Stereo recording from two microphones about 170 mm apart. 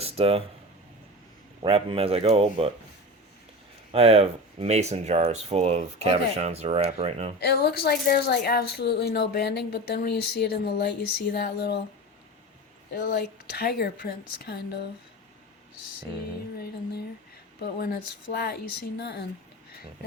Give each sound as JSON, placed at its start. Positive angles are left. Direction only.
{"t": 0.0, "sound": "a sound", "side_deg": -35}
{"t": 1.6, "sound": "speech", "side_deg": -35}
{"t": 3.9, "sound": "speech", "side_deg": -35}
{"t": 7.3, "sound": "a woman's voice", "side_deg": 70}
{"t": 12.9, "sound": "a woman's voice", "side_deg": 65}
{"t": 17.6, "sound": "a woman's voice", "side_deg": 65}